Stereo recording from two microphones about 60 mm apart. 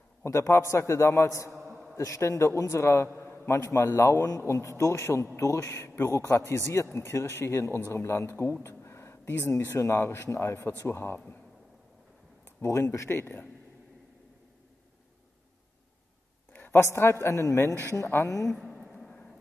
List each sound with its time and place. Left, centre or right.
0.2 s a man's voice: left
5.4 s a man's voice: left
8.6 s a sound: left
9.5 s speech: left
9.8 s a man's voice: left
10.3 s speech: left
12.6 s a man's voice: left
13.2 s speech: left
16.5 s a sound: left
16.9 s a man's voice: left
18.5 s a sound: centre